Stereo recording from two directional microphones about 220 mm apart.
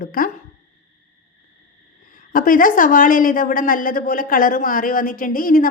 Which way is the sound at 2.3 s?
40° left (ahead or behind).